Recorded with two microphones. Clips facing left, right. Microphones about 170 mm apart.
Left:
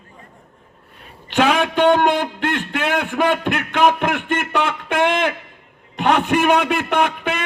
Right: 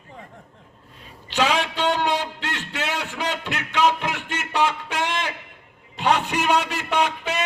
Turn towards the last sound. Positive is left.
turn(degrees=55)  # may be behind; listen again after turning